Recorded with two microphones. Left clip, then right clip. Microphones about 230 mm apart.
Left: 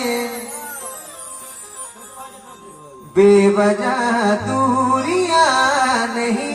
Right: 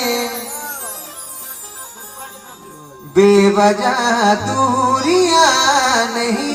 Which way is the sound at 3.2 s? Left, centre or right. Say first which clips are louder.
Right 1 dB; right.